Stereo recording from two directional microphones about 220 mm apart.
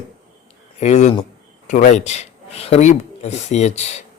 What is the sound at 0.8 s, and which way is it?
Speech, 30° left (ahead or behind).